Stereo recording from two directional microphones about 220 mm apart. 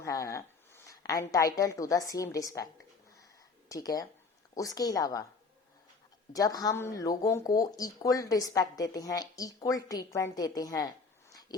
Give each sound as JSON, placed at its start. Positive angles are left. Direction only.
{"t": 0.0, "sound": "a woman's voice", "side_deg": 15}
{"t": 3.7, "sound": "a woman's voice", "side_deg": 15}
{"t": 6.3, "sound": "a woman's voice", "side_deg": 15}
{"t": 11.3, "sound": "a sound", "side_deg": 15}